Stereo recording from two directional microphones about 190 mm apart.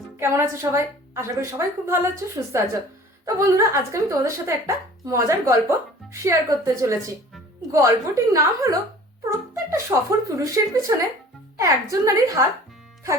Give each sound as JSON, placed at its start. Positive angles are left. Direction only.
{"t": 0.2, "sound": "a woman's voice", "side_deg": -15}